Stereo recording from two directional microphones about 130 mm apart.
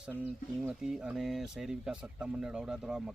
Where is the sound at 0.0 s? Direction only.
10° right (ahead or behind).